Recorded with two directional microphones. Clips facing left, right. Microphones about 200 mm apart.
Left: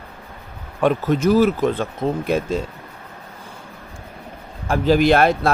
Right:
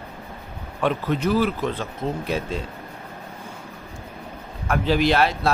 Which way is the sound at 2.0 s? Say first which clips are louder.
Left 5 dB; 70° left (ahead or behind).